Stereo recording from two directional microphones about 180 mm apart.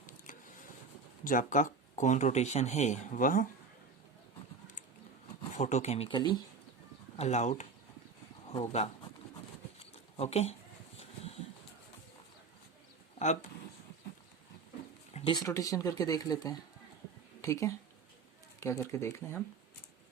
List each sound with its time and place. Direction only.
1.2 s speech: 45° left (ahead or behind)
5.5 s speech: 40° left (ahead or behind)
6.1 s speech: 25° left (ahead or behind)
7.2 s speech: 40° left (ahead or behind)
10.2 s speech: 35° left (ahead or behind)
13.1 s a sound: 40° left (ahead or behind)
15.3 s speech: 20° left (ahead or behind)